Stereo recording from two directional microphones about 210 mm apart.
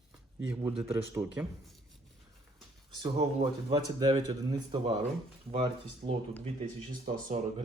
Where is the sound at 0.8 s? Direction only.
5° right (ahead or behind).